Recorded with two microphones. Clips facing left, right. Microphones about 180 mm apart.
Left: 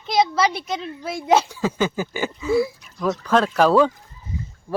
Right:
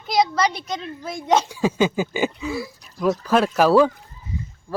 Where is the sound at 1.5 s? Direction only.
15° right (ahead or behind).